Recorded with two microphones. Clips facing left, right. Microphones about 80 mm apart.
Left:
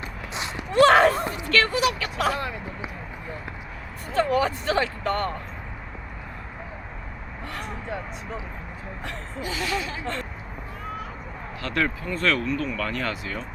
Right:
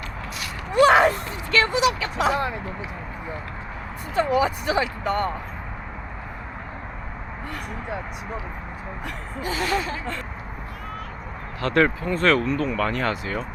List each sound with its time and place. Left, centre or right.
0.7 s a sound: centre
1.3 s speech: centre
4.1 s speech: centre
9.4 s speech: right
11.6 s speech: right